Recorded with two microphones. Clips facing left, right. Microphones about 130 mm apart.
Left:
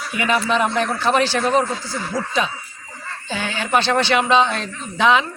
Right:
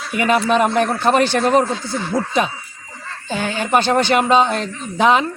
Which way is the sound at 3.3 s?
45° right (ahead or behind).